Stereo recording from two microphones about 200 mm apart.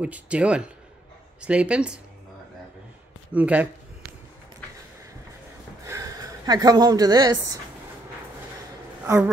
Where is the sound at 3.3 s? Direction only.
5° right (ahead or behind).